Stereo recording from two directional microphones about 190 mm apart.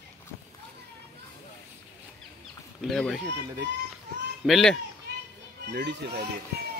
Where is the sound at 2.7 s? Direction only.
Centre (ahead or behind).